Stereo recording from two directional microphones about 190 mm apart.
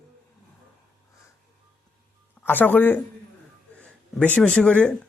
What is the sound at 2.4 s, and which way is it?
A man's voice, 10° left (ahead or behind).